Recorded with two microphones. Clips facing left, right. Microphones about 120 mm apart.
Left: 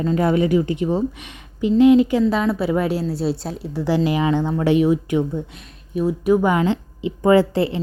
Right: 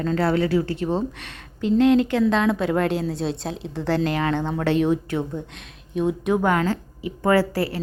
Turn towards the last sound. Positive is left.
turn(degrees=20)  # may be behind; listen again after turning